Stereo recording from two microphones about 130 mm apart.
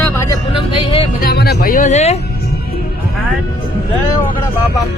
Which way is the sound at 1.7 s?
75° left (ahead or behind).